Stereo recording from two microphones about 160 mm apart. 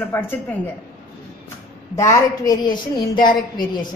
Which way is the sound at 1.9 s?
20° left (ahead or behind).